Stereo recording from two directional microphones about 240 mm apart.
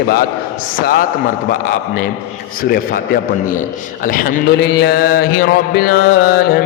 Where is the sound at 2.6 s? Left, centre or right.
Left.